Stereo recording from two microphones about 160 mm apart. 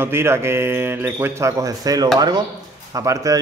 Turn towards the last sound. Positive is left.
turn(degrees=-20)  # may be behind; listen again after turning